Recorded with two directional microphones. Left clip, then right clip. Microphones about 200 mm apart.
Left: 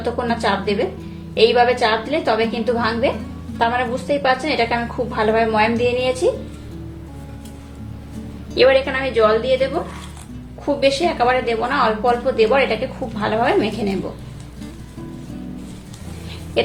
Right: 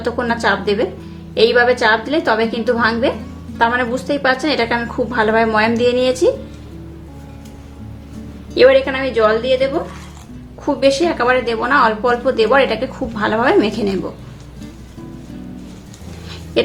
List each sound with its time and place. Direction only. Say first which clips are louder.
0.0 s a woman's voice: right 3 dB; 25° right (ahead or behind)
8.5 s a woman's voice: right 3 dB; 20° right (ahead or behind)